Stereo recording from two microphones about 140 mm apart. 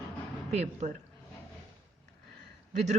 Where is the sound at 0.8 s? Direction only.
60° right (ahead or behind).